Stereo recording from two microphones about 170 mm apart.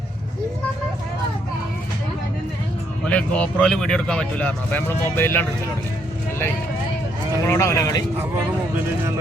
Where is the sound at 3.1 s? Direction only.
5° left (ahead or behind).